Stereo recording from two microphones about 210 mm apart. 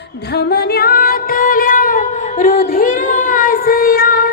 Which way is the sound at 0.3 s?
50° left (ahead or behind).